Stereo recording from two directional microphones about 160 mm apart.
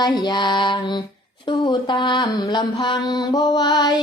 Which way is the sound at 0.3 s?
30° left (ahead or behind).